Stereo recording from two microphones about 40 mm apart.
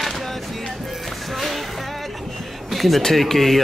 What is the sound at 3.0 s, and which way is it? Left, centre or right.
Speech, centre.